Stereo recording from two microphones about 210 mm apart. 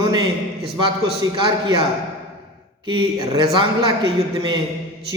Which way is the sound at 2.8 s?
20° right (ahead or behind).